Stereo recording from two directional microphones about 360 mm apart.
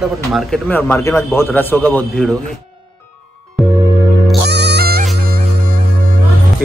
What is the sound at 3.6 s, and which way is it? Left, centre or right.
Music, centre.